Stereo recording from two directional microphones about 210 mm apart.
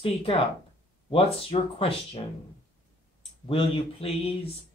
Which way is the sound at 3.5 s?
25° left (ahead or behind).